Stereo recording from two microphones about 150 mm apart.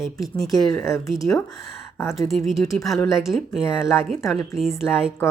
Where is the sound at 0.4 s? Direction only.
25° left (ahead or behind).